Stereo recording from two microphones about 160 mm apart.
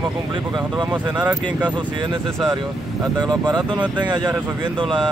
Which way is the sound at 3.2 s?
25° right (ahead or behind).